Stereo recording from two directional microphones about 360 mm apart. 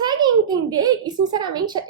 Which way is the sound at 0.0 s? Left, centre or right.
Centre.